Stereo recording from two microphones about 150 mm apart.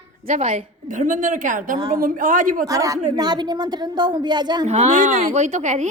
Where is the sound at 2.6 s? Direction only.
20° right (ahead or behind).